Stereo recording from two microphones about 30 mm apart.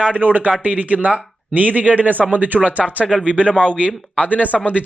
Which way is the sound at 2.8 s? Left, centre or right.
Centre.